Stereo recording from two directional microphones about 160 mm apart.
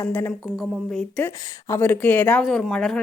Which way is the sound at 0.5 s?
Centre (ahead or behind).